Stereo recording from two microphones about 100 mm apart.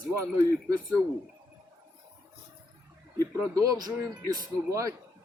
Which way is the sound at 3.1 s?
35° right (ahead or behind).